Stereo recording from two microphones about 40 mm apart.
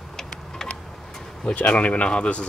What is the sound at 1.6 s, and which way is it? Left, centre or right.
Speech, left.